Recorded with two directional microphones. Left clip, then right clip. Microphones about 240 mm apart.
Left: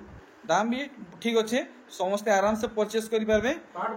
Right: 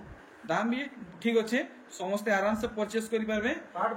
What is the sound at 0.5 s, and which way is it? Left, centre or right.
Speech, centre.